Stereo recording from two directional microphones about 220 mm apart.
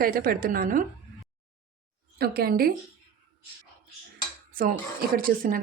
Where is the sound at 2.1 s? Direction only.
45° right (ahead or behind).